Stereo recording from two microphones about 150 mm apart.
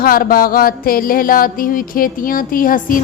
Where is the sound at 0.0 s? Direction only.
75° left (ahead or behind).